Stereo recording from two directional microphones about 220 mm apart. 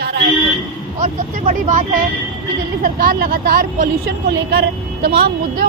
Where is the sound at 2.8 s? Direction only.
40° right (ahead or behind).